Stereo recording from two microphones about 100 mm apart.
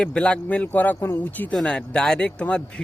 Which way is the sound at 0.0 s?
10° left (ahead or behind).